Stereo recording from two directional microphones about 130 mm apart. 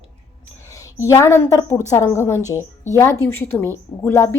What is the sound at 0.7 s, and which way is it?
A woman's voice, 25° left (ahead or behind).